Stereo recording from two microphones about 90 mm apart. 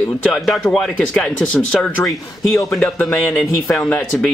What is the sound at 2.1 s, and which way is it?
Speech, 40° left (ahead or behind).